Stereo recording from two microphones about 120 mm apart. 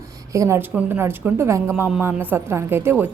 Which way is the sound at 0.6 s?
15° right (ahead or behind).